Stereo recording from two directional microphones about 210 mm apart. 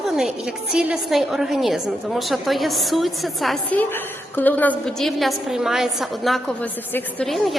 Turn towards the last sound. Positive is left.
turn(degrees=0)  # may be behind; listen again after turning